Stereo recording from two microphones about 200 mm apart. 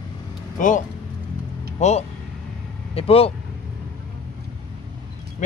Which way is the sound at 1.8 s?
35° left (ahead or behind).